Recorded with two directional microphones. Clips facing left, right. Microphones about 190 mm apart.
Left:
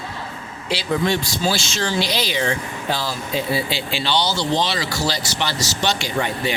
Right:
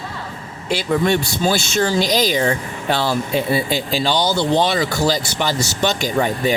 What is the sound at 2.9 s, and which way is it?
Speech, 65° right (ahead or behind).